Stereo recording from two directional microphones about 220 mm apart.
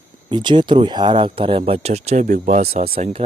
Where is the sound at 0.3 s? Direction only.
20° right (ahead or behind).